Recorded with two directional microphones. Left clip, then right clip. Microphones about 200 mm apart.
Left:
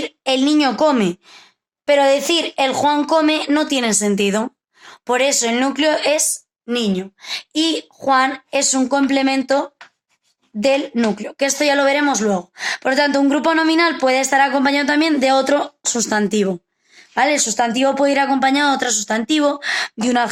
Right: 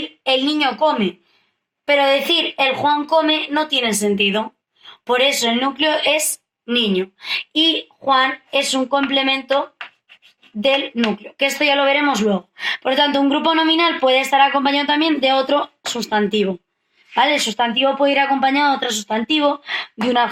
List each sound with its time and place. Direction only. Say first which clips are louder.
0.3 s a woman's voice: left 1 dB; 60° left (ahead or behind)
1.9 s a woman's voice: left 1 dB; 60° left (ahead or behind)
10.6 s a woman's voice: left 1 dB; 55° left (ahead or behind)